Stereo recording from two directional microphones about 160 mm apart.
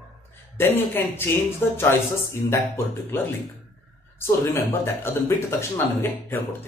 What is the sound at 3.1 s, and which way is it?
A man's voice, 10° left (ahead or behind).